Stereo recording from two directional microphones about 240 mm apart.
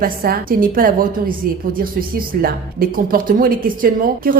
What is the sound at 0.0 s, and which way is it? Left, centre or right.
A woman's voice, right.